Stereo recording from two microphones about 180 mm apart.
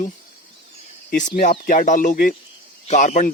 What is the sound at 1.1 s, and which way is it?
Speech, 50° left (ahead or behind).